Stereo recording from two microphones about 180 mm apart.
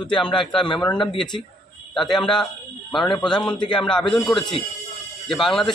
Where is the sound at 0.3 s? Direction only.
25° left (ahead or behind).